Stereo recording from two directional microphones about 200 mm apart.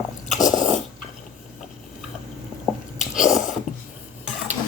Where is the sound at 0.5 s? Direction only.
40° left (ahead or behind).